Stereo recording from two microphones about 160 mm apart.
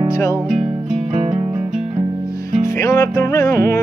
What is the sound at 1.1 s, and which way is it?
Music, 45° right (ahead or behind).